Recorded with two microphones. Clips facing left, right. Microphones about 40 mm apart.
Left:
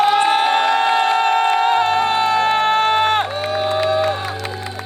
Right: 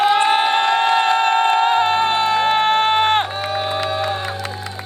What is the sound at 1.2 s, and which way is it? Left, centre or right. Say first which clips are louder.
Music: even; right.